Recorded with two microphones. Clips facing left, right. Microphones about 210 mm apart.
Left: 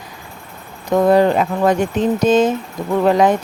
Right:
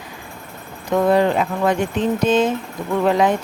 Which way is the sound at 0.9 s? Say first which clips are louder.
Left 3 dB; 40° left (ahead or behind).